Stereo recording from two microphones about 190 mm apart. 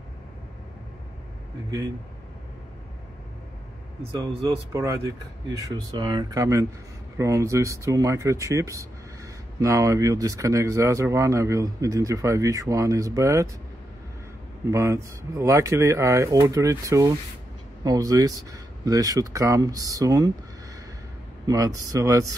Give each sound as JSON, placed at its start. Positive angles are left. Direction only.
{"t": 4.2, "sound": "speech", "side_deg": -20}
{"t": 14.7, "sound": "speech", "side_deg": -15}
{"t": 21.5, "sound": "speech", "side_deg": -20}